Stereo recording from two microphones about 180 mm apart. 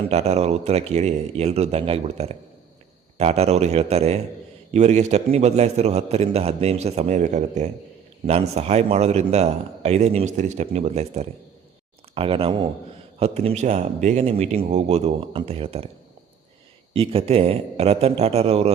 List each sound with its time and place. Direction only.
0.1 s a man's voice: 35° right (ahead or behind)
16.9 s a man's voice: 30° right (ahead or behind)